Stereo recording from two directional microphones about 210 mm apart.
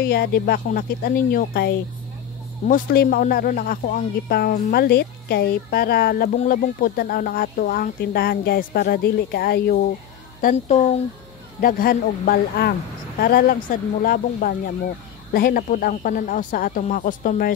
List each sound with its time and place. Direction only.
0.0 s speech: 50° left (ahead or behind)
10.4 s speech: 35° left (ahead or behind)
11.6 s speech: 45° left (ahead or behind)